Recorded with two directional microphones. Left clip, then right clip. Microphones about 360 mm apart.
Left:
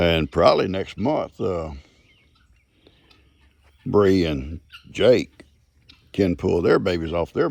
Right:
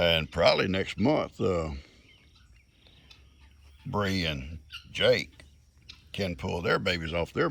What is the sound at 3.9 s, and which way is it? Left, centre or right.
Speech, centre.